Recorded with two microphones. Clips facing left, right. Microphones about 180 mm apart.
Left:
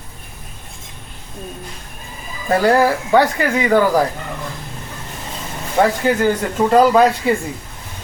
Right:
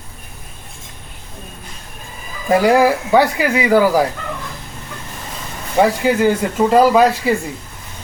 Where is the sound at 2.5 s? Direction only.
10° right (ahead or behind).